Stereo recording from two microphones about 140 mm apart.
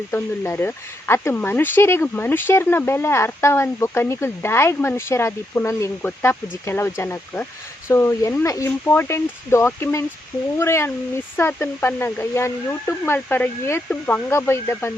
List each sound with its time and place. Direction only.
0.1 s speech: 15° left (ahead or behind)